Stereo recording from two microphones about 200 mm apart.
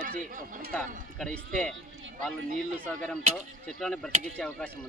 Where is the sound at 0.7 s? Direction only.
5° left (ahead or behind).